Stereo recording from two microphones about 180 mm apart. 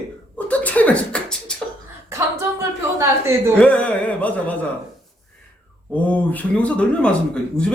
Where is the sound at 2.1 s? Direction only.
15° right (ahead or behind).